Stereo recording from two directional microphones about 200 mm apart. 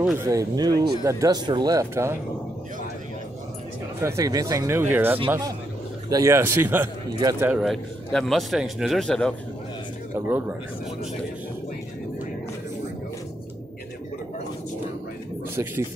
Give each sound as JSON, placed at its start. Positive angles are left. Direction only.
{"t": 0.0, "sound": "speech", "side_deg": -15}
{"t": 4.0, "sound": "speech", "side_deg": -15}
{"t": 10.1, "sound": "speech", "side_deg": -10}
{"t": 15.5, "sound": "speech", "side_deg": -10}